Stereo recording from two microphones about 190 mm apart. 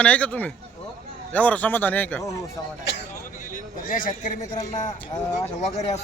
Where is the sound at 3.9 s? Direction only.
45° left (ahead or behind).